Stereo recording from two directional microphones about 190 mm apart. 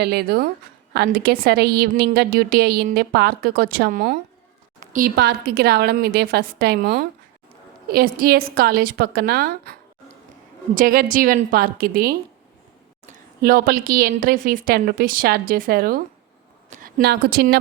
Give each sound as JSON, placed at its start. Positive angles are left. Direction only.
{"t": 0.0, "sound": "a woman's voice", "side_deg": -55}
{"t": 10.8, "sound": "a woman's voice", "side_deg": -45}
{"t": 16.6, "sound": "a sound", "side_deg": -40}
{"t": 17.0, "sound": "a woman's voice", "side_deg": -55}